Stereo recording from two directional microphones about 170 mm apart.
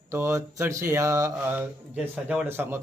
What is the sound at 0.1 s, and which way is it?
A man's voice, 15° right (ahead or behind).